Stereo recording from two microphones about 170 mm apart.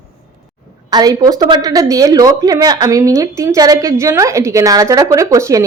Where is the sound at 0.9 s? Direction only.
20° right (ahead or behind).